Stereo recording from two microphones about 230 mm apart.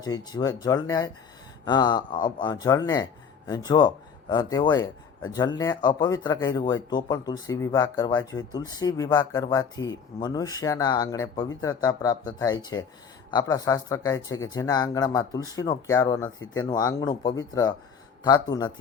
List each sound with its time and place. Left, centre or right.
0.0 s speech: centre